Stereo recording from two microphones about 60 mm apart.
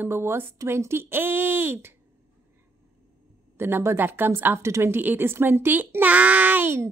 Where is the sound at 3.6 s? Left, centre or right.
Right.